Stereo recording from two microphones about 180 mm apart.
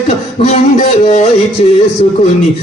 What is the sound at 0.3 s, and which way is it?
Music, 35° left (ahead or behind).